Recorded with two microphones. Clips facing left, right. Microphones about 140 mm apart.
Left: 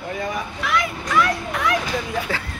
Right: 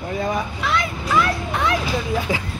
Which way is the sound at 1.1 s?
25° right (ahead or behind).